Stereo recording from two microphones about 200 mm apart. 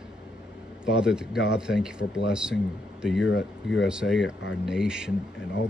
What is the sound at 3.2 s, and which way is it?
Speech, 65° left (ahead or behind).